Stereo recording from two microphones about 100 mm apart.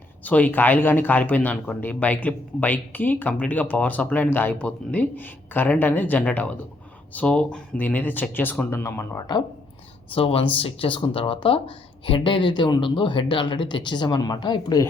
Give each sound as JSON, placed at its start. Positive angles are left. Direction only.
{"t": 0.3, "sound": "speech", "side_deg": 15}
{"t": 10.2, "sound": "speech", "side_deg": 70}